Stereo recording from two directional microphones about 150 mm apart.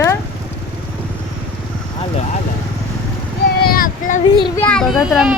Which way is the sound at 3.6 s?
75° left (ahead or behind).